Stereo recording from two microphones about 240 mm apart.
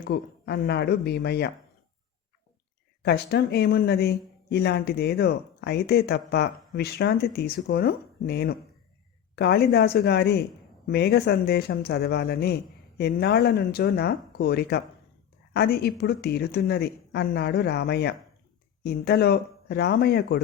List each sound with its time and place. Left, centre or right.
0.1 s speech: left
3.0 s speech: left